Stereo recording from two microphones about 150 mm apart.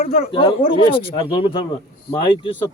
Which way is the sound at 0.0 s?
75° left (ahead or behind).